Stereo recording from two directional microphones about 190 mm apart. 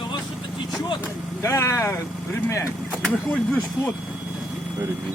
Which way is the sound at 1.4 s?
15° left (ahead or behind).